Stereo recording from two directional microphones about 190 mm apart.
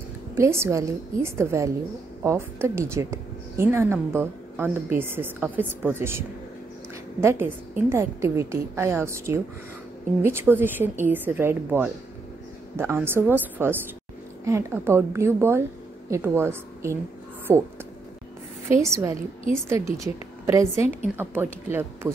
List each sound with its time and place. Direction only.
0.4 s a woman's voice: 15° right (ahead or behind)
18.8 s a woman's voice: 15° right (ahead or behind)